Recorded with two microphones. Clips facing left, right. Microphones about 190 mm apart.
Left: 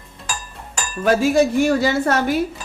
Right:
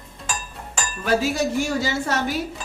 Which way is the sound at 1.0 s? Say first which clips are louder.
Left 6 dB; 50° left (ahead or behind).